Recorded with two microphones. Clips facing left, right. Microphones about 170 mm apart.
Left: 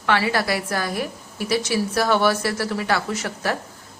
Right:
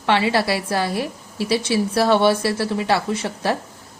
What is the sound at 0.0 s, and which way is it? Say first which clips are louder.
A woman's voice: right 3 dB; 25° right (ahead or behind).